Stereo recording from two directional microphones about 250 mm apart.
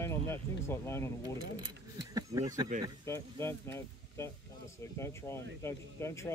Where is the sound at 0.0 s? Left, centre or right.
Centre.